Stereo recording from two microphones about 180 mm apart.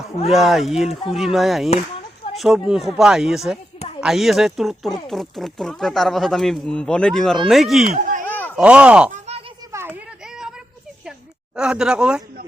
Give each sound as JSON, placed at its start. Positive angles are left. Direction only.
{"t": 0.3, "sound": "speech", "side_deg": 0}
{"t": 9.7, "sound": "a sound", "side_deg": -10}
{"t": 11.5, "sound": "speech", "side_deg": -5}